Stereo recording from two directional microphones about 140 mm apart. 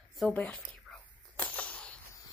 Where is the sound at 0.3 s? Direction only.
10° left (ahead or behind).